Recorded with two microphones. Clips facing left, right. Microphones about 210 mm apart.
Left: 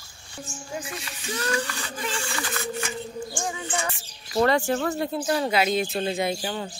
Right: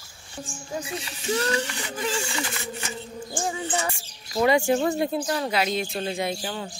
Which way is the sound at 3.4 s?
30° right (ahead or behind).